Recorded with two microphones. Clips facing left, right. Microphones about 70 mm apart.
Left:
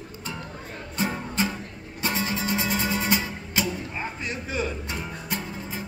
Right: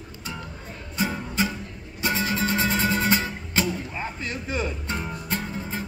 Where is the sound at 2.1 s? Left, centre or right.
Left.